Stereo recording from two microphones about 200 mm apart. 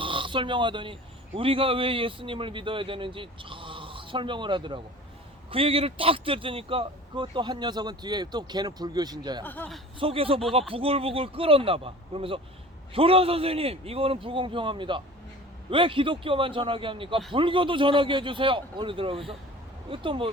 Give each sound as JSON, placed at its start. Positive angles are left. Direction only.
{"t": 0.0, "sound": "a man's voice", "side_deg": -25}
{"t": 9.4, "sound": "speech", "side_deg": 10}
{"t": 10.0, "sound": "a man's voice", "side_deg": -30}